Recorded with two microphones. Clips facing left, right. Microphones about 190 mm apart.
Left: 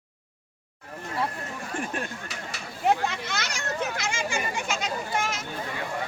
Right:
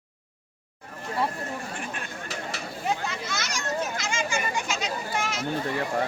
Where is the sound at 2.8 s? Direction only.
60° left (ahead or behind).